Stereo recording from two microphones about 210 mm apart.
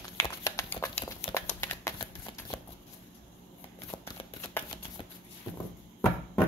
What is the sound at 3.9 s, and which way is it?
Shuffling cards, 20° left (ahead or behind).